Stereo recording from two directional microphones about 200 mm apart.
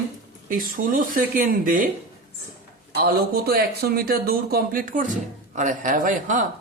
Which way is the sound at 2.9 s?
50° right (ahead or behind).